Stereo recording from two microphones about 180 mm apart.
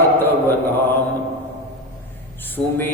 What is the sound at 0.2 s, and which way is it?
Mantra, 10° left (ahead or behind).